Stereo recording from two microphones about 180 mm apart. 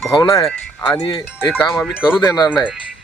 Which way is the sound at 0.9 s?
25° left (ahead or behind).